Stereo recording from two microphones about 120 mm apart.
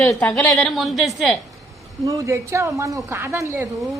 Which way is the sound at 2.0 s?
25° right (ahead or behind).